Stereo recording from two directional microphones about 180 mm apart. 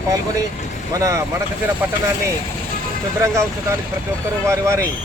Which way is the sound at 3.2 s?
15° right (ahead or behind).